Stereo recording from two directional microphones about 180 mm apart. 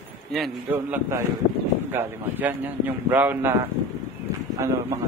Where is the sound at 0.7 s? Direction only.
15° right (ahead or behind).